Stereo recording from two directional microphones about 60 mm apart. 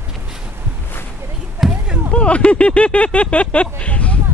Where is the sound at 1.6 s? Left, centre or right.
Centre.